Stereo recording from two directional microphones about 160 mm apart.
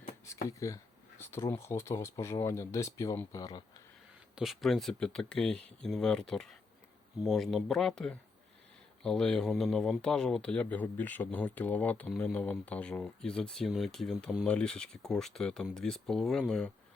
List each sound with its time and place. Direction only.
0.4 s speech: 20° left (ahead or behind)
4.4 s speech: centre (ahead or behind)